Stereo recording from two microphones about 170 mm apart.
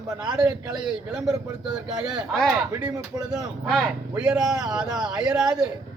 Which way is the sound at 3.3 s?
5° right (ahead or behind).